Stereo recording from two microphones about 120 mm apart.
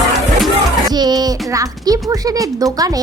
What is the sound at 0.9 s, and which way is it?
A woman's voice, 35° right (ahead or behind).